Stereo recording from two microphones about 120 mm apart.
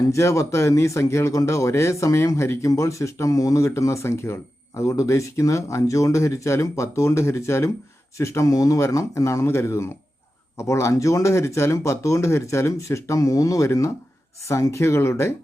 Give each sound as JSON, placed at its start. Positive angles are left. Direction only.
{"t": 0.0, "sound": "speech", "side_deg": 25}